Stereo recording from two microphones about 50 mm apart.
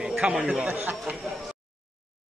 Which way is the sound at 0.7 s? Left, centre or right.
Right.